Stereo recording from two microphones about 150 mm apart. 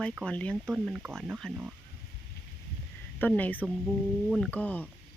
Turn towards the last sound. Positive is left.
turn(degrees=10)  # may be behind; listen again after turning